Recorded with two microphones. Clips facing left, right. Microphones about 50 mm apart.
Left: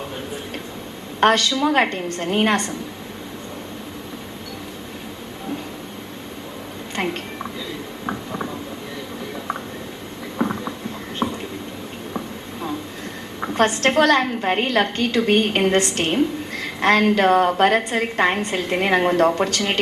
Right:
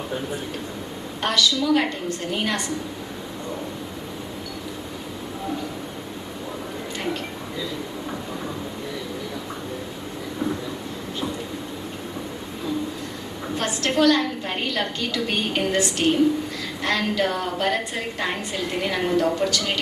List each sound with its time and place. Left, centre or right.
1.2 s a woman's voice: left
6.9 s a sound: left
13.6 s a woman's voice: left